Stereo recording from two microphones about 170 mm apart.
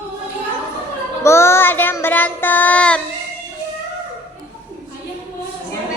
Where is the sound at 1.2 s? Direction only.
15° left (ahead or behind).